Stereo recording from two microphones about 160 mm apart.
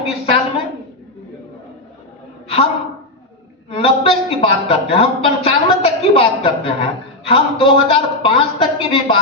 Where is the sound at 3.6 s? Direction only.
35° left (ahead or behind).